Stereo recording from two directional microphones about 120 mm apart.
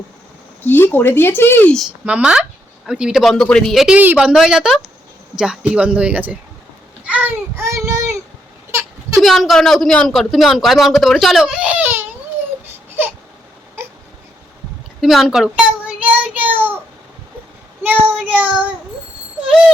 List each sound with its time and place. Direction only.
0.6 s speech: 15° left (ahead or behind)
2.0 s a child's voice: 10° right (ahead or behind); by 8.0 s 25° right (ahead or behind)
8.7 s a sound: 25° right (ahead or behind)
9.2 s speech: centre (ahead or behind); by 12.0 s 15° right (ahead or behind)
15.0 s speech: centre (ahead or behind)
17.8 s speech: 10° right (ahead or behind)